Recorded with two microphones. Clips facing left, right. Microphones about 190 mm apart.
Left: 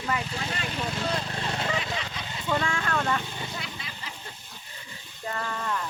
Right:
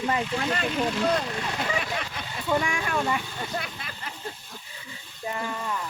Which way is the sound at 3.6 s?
55° right (ahead or behind).